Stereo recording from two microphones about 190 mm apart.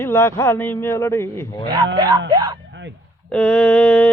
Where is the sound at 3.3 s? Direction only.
5° left (ahead or behind).